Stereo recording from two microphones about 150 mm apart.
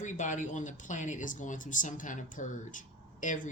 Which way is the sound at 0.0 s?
55° left (ahead or behind).